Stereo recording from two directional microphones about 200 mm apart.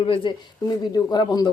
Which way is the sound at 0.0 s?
25° left (ahead or behind).